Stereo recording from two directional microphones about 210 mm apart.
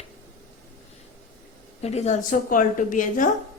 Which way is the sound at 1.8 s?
30° left (ahead or behind).